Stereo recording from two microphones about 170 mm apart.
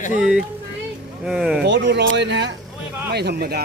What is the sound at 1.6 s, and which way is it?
Speech, 85° right.